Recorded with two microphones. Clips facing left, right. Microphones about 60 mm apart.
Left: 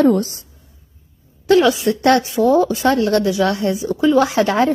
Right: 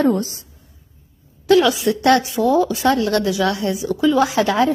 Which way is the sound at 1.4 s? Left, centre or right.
Left.